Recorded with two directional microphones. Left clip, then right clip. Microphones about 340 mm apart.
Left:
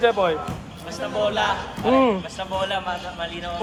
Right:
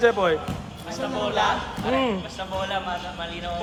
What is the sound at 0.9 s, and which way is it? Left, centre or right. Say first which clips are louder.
A man's voice: left 2 dB; left.